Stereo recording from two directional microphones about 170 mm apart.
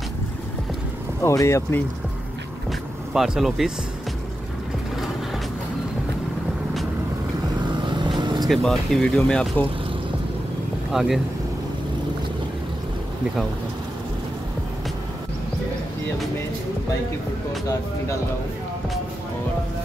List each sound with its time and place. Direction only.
1.2 s speech: 15° left (ahead or behind)
3.1 s speech: centre (ahead or behind)
7.8 s vehicle: 25° right (ahead or behind)
8.5 s speech: 5° left (ahead or behind)
10.9 s speech: centre (ahead or behind)